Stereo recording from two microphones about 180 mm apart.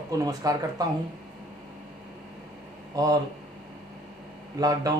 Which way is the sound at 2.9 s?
20° right (ahead or behind).